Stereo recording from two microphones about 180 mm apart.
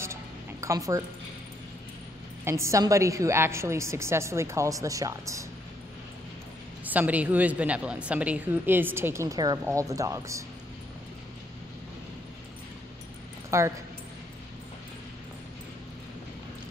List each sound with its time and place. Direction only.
0.0 s music: 15° right (ahead or behind)
2.4 s a woman's voice: 15° right (ahead or behind)
6.8 s a woman's voice: 10° right (ahead or behind)
13.5 s speech: 15° right (ahead or behind)